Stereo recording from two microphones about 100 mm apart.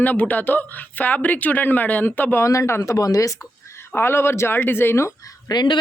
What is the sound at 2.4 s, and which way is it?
Speech, 30° left (ahead or behind).